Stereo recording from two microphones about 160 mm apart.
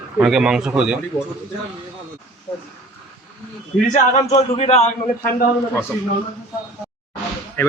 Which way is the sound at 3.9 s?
45° left (ahead or behind).